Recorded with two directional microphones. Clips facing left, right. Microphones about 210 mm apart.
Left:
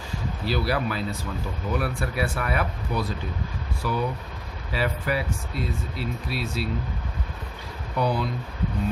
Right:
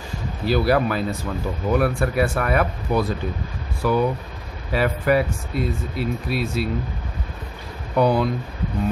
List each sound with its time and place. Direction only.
0.5 s speech: 50° right (ahead or behind)
7.9 s speech: 55° right (ahead or behind)